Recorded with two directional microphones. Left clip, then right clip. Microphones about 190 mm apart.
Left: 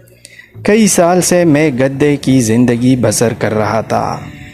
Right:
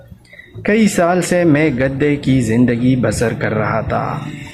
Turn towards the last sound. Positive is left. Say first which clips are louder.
# left 4 dB
turn(degrees=45)  # may be behind; listen again after turning